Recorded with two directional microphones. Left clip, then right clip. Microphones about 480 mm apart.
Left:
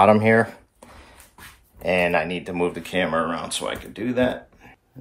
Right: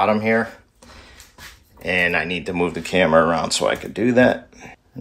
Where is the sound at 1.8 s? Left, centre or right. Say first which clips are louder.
Right 1 dB; centre.